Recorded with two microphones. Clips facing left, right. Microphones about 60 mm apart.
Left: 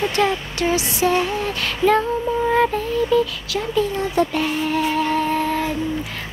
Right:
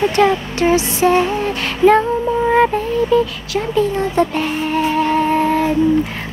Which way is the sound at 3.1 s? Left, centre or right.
Right.